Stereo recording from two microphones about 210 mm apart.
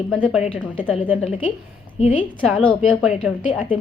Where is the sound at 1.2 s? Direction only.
25° left (ahead or behind).